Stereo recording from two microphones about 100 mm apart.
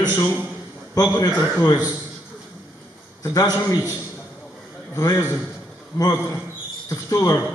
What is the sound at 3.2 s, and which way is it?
Speech, 30° left (ahead or behind).